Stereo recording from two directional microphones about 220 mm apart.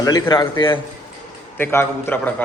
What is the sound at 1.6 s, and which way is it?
Speech, 10° left (ahead or behind).